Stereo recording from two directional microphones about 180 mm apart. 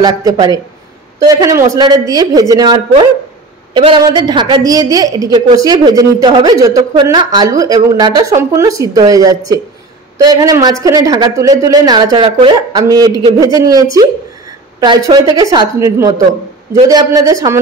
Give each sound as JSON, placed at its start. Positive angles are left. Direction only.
{"t": 0.0, "sound": "a woman's voice", "side_deg": -20}